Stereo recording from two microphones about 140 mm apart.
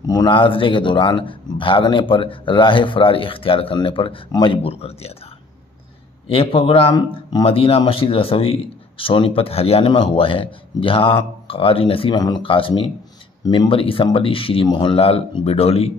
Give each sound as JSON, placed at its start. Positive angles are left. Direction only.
{"t": 0.0, "sound": "speech", "side_deg": 30}
{"t": 6.2, "sound": "speech", "side_deg": 40}